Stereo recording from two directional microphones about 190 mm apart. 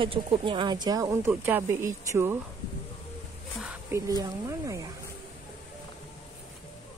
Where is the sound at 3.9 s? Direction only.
20° right (ahead or behind).